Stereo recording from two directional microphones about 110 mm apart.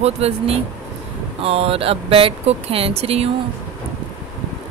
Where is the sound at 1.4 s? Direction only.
60° right (ahead or behind).